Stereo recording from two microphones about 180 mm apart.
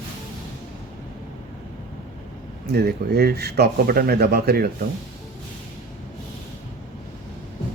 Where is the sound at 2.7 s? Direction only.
65° right (ahead or behind).